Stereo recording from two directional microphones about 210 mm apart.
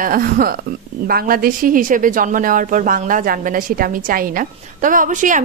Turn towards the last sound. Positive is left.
turn(degrees=-35)  # may be behind; listen again after turning